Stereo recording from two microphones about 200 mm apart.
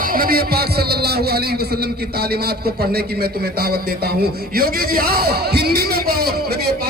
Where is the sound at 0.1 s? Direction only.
45° right (ahead or behind).